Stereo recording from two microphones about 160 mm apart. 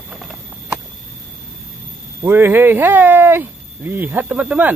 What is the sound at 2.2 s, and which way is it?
Speech, 15° right (ahead or behind).